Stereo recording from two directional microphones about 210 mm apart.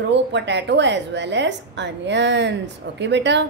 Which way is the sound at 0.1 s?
55° right (ahead or behind).